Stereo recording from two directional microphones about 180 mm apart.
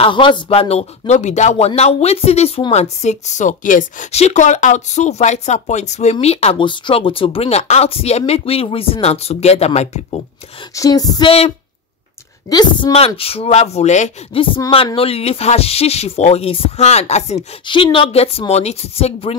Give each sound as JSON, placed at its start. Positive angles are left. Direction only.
{"t": 0.0, "sound": "a woman's voice", "side_deg": 25}
{"t": 10.7, "sound": "female singing", "side_deg": 20}
{"t": 12.4, "sound": "a woman's voice", "side_deg": 25}
{"t": 17.6, "sound": "a woman's voice", "side_deg": 25}